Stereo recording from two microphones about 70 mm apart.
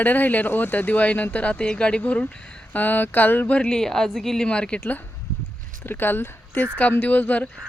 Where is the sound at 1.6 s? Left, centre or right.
Centre.